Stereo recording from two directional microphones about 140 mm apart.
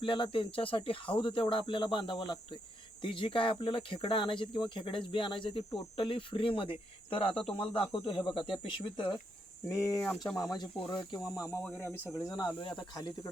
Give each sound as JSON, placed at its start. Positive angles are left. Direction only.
{"t": 0.0, "sound": "speech", "side_deg": 40}
{"t": 9.6, "sound": "speech", "side_deg": 20}
{"t": 10.5, "sound": "speech", "side_deg": 30}